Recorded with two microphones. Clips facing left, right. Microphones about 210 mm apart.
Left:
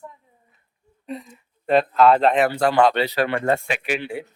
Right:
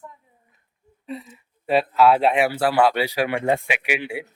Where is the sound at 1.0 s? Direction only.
5° right (ahead or behind).